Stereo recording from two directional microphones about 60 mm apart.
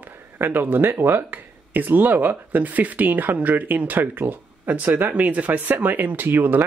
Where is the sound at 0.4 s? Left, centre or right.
Right.